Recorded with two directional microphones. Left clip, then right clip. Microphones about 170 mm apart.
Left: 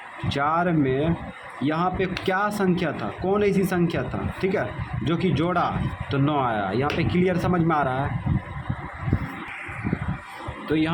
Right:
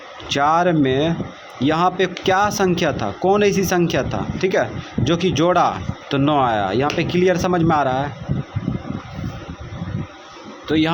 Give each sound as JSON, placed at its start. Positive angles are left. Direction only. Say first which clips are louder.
{"t": 0.3, "sound": "a man's voice", "louder": "right 7 dB", "side_deg": -30}
{"t": 10.7, "sound": "a man's voice", "louder": "right 6 dB", "side_deg": -30}